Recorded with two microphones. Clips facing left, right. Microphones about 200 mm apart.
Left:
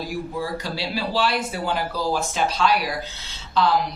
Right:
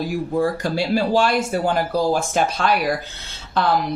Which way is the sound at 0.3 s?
50° right (ahead or behind).